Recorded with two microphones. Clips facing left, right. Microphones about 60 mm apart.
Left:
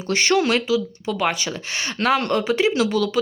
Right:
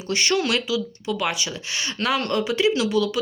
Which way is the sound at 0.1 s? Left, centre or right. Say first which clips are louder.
Left 3 dB; left.